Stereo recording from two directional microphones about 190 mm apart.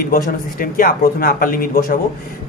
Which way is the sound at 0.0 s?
50° left (ahead or behind).